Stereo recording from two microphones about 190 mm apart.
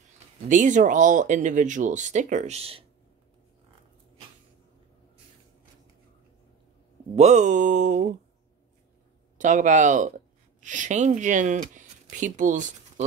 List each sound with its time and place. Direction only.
0.5 s speech: 40° right (ahead or behind)
7.2 s speech: 35° right (ahead or behind)
9.4 s speech: 40° right (ahead or behind)